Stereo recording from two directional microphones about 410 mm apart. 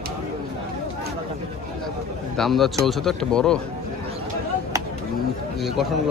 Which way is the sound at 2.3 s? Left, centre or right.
Centre.